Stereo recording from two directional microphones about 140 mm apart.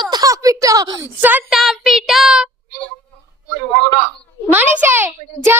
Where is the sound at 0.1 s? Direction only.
25° right (ahead or behind).